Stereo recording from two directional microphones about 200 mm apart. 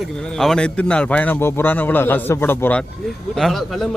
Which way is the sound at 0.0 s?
Centre (ahead or behind).